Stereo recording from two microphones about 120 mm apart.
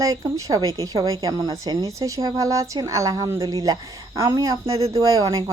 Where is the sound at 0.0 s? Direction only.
25° right (ahead or behind).